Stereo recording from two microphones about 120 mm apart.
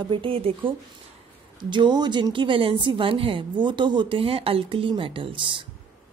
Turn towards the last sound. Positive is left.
turn(degrees=-45)  # may be behind; listen again after turning